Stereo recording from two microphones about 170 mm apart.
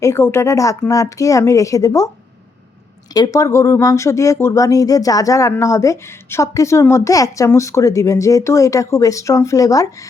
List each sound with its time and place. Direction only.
0.0 s speech: 15° left (ahead or behind)
3.1 s speech: 20° left (ahead or behind)